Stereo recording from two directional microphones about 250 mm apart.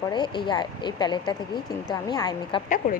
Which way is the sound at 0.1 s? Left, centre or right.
Centre.